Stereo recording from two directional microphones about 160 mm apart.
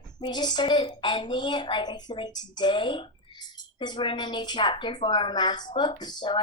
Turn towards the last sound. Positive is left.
turn(degrees=25)  # may be behind; listen again after turning